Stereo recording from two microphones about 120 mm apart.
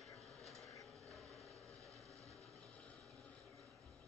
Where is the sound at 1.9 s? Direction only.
25° right (ahead or behind).